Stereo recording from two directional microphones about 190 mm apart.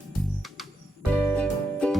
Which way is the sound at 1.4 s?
5° left (ahead or behind).